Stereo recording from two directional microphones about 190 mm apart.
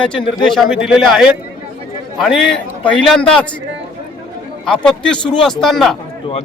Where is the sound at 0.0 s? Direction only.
5° left (ahead or behind).